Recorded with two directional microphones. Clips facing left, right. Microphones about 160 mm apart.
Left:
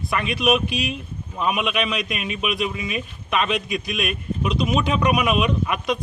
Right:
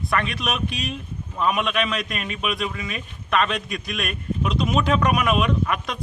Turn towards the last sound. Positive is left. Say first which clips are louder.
# left 1 dB
turn(degrees=5)  # may be behind; listen again after turning